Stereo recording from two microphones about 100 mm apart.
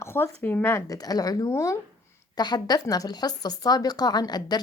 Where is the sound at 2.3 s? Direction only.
45° left (ahead or behind).